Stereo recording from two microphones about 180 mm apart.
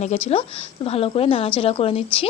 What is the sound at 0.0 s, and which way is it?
Speech, 35° left (ahead or behind).